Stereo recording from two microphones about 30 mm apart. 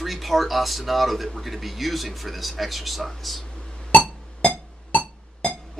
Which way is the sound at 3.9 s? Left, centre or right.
Left.